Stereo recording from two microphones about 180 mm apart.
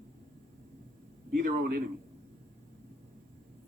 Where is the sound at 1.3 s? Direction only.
55° right (ahead or behind).